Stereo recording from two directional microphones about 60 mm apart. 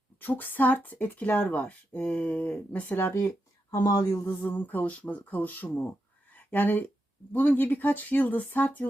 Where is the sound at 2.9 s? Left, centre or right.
Left.